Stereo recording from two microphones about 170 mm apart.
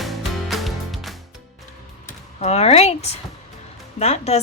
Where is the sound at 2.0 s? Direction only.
40° left (ahead or behind).